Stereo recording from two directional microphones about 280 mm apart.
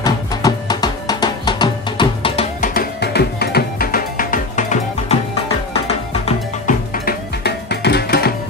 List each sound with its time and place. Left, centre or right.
0.0 s music: centre
6.7 s music: left